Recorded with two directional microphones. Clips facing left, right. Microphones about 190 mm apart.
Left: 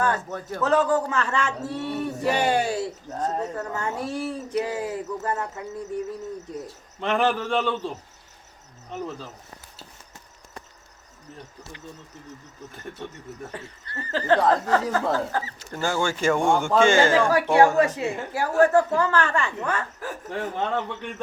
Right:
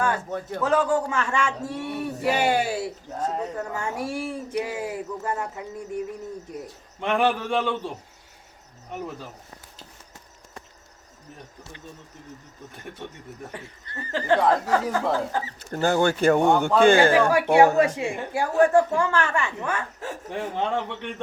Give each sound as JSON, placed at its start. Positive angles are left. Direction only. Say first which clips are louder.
{"t": 0.0, "sound": "a man's voice", "louder": "even", "side_deg": -10}
{"t": 7.0, "sound": "a man's voice", "louder": "even", "side_deg": -15}
{"t": 13.0, "sound": "a man's voice", "louder": "left 1 dB", "side_deg": -15}
{"t": 15.7, "sound": "speech", "louder": "right 4 dB", "side_deg": -60}
{"t": 17.0, "sound": "a man's voice", "louder": "right 1 dB", "side_deg": -15}
{"t": 20.0, "sound": "speech", "louder": "even", "side_deg": -25}